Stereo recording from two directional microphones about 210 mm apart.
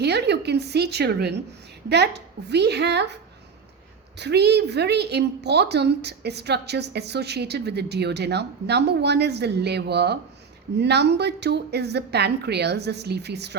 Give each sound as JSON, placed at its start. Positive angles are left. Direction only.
{"t": 0.0, "sound": "a woman's voice", "side_deg": -50}
{"t": 4.2, "sound": "a woman's voice", "side_deg": -55}